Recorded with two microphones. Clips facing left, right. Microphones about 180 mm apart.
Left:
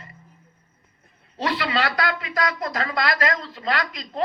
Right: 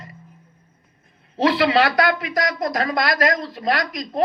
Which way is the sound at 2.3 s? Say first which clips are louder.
Right 3 dB; 40° right (ahead or behind).